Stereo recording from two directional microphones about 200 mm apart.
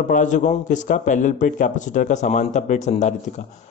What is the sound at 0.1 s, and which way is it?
Speech, 40° left (ahead or behind).